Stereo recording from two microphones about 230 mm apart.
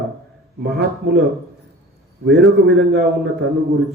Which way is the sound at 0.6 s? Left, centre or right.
Right.